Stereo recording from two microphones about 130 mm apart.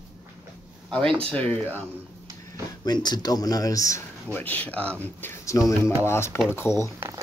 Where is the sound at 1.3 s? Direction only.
10° left (ahead or behind).